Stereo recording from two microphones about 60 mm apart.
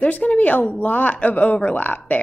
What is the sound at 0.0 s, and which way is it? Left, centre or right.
Speech, left.